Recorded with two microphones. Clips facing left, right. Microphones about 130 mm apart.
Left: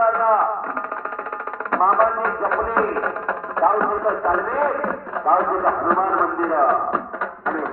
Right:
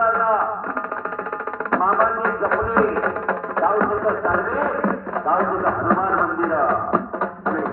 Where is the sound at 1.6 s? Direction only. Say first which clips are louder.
Left 2 dB; 45° left (ahead or behind).